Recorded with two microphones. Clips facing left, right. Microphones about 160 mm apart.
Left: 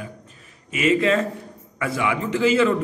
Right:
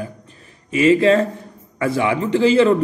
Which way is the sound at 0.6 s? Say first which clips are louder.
Right 6 dB; 30° right (ahead or behind).